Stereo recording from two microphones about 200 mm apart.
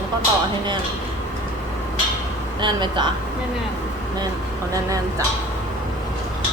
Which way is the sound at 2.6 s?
20° right (ahead or behind).